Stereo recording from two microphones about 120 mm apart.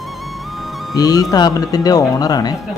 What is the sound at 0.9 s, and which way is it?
A man's voice, 30° left (ahead or behind).